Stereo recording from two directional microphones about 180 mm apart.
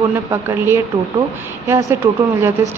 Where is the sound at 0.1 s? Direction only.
15° right (ahead or behind).